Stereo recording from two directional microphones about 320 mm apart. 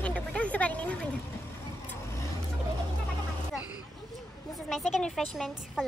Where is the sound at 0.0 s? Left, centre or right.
Centre.